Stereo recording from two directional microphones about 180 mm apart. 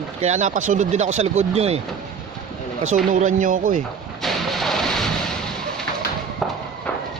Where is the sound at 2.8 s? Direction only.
45° right (ahead or behind).